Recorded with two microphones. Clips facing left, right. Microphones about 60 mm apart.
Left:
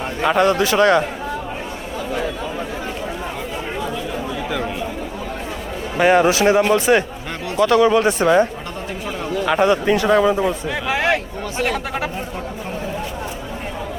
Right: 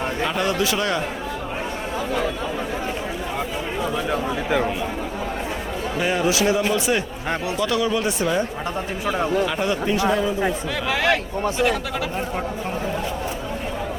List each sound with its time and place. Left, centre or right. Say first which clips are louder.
0.3 s a man's voice: left 9 dB; left
6.0 s a man's voice: left 10 dB; left
6.2 s speech: left 5 dB; left
9.5 s a man's voice: left 7 dB; left
10.8 s a sound: left 2 dB; centre
11.5 s speech: left 3 dB; left